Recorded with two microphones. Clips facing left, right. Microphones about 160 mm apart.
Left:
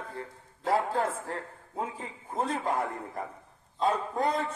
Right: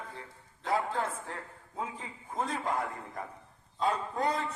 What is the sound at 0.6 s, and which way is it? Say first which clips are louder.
Speech: left 4 dB; 35° left (ahead or behind).